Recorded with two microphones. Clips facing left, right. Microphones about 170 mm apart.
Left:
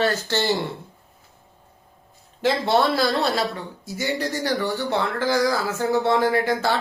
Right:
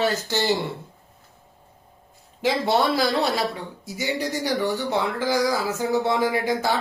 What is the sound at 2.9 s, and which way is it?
Speech, 15° right (ahead or behind).